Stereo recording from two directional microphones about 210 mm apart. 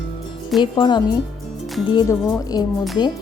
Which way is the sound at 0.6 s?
20° left (ahead or behind).